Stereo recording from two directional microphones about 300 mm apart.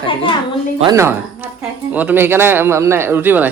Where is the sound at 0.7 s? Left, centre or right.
Centre.